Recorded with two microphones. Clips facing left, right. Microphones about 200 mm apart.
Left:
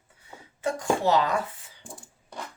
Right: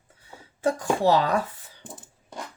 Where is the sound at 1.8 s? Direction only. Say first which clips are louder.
Right 2 dB; centre (ahead or behind).